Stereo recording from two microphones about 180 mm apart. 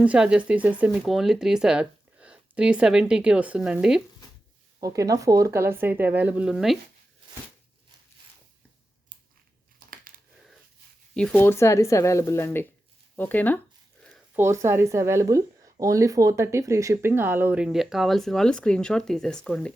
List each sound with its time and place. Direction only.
0.0 s speech: 5° right (ahead or behind)
4.8 s a woman's voice: 20° right (ahead or behind); by 6.7 s centre (ahead or behind)
11.1 s speech: 5° left (ahead or behind)
14.3 s a woman's voice: 15° right (ahead or behind); by 19.7 s 5° left (ahead or behind)